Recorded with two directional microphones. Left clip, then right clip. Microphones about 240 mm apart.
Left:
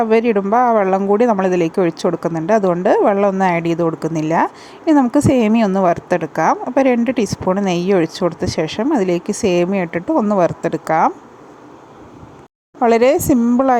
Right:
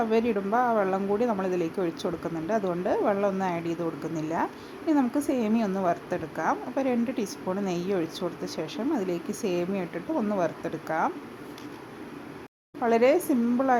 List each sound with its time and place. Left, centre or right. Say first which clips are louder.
0.0 s a woman's voice: left 11 dB; left
12.8 s a woman's voice: left 10 dB; left